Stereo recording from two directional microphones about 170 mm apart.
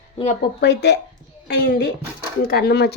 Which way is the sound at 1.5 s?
60° left (ahead or behind).